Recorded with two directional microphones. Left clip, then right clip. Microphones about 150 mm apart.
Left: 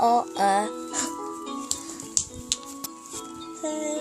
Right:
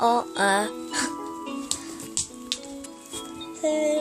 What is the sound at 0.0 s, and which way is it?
Music, centre (ahead or behind).